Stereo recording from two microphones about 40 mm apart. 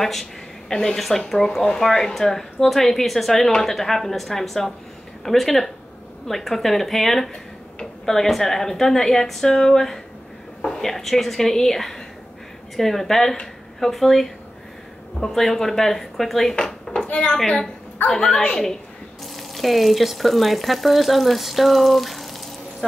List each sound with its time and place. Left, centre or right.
0.0 s a woman's voice: centre
16.5 s dishes: centre
17.1 s a woman's voice: left
18.1 s speech: centre
19.3 s speech: centre